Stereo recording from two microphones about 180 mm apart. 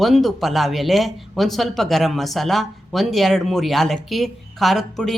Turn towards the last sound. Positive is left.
turn(degrees=0)  # may be behind; listen again after turning